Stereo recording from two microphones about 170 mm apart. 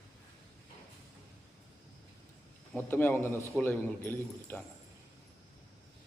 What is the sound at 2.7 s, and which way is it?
A man's voice, 10° left (ahead or behind).